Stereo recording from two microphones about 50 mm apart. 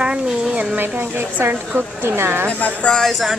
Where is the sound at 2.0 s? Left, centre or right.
Right.